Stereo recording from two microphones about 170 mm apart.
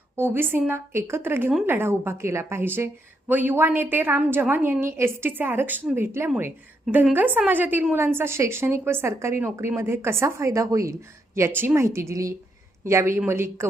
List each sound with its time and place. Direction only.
0.2 s a woman's voice: 15° right (ahead or behind)